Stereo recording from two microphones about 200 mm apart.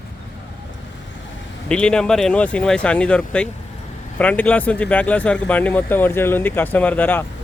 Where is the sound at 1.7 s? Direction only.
5° left (ahead or behind).